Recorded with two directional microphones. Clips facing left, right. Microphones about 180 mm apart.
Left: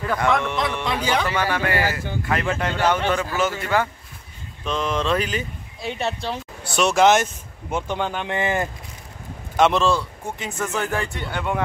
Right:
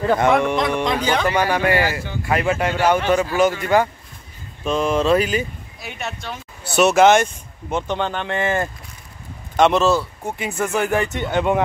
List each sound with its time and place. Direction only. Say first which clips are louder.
0.0 s speech: right 5 dB; 25° right (ahead or behind)
0.8 s speech: right 3 dB; 10° left (ahead or behind)
1.3 s speech: right 4 dB; 15° right (ahead or behind)
5.8 s speech: left 5 dB; 30° left (ahead or behind)
6.7 s speech: right 3 dB; 5° right (ahead or behind); by 8.6 s 15° left (ahead or behind)
9.6 s speech: right 3 dB; centre (ahead or behind); by 11.6 s 20° right (ahead or behind)